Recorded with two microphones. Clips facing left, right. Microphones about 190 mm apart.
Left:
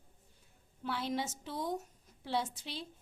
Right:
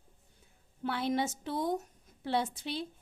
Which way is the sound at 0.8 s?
60° right (ahead or behind).